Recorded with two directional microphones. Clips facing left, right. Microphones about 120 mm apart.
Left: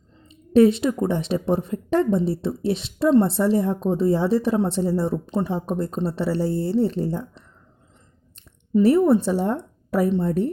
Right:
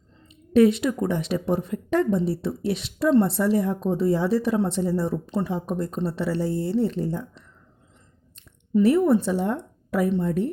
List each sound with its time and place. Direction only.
0.3 s speech: 30° left (ahead or behind)
8.7 s a woman's voice: 35° left (ahead or behind)